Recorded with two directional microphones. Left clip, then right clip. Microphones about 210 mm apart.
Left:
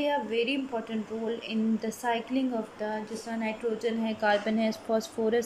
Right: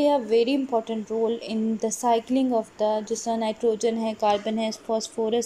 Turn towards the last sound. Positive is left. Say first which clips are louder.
# right 2 dB
turn(degrees=-5)  # may be behind; listen again after turning